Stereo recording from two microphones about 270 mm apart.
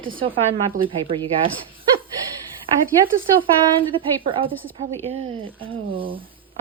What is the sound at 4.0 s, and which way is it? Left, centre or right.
Speech, centre.